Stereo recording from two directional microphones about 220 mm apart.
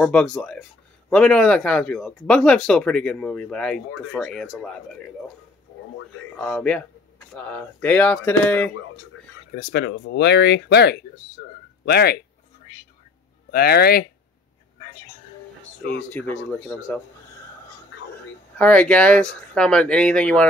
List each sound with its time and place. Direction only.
0.0 s speech: 5° left (ahead or behind)
6.3 s speech: 5° left (ahead or behind)
9.6 s speech: 45° left (ahead or behind)
13.5 s speech: 45° left (ahead or behind)
16.0 s speech: 5° left (ahead or behind)
18.6 s speech: 5° left (ahead or behind)